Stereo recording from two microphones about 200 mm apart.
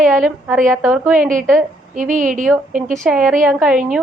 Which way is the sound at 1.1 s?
40° right (ahead or behind).